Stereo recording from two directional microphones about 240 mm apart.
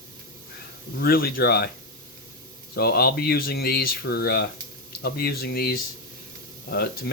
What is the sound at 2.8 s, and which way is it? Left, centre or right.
Speech, left.